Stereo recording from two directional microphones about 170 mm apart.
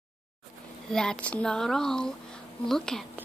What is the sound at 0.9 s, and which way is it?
Speech, 5° left (ahead or behind).